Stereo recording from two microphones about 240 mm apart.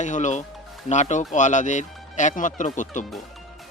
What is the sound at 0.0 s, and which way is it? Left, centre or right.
Speech, left.